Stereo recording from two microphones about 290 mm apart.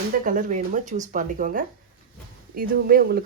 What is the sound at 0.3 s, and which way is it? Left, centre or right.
A woman's voice, right.